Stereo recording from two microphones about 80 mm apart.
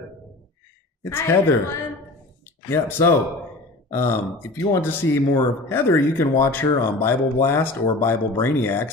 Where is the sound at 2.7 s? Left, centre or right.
Left.